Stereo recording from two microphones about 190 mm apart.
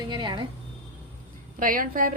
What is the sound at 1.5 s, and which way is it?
Speech, 45° right (ahead or behind).